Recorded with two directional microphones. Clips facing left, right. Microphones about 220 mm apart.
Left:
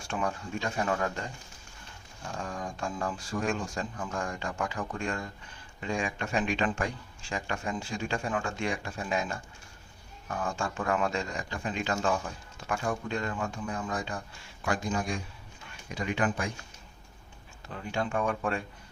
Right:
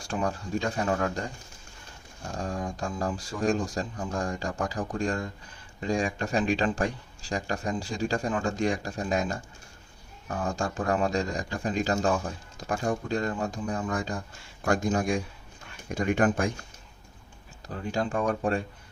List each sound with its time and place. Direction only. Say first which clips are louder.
0.1 s speech: right 3 dB; 35° right (ahead or behind)
2.3 s speech: right 4 dB; 35° right (ahead or behind)
17.7 s speech: right 3 dB; 35° right (ahead or behind)